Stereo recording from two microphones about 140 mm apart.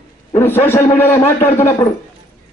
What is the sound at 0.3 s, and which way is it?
A man's voice, 15° left (ahead or behind).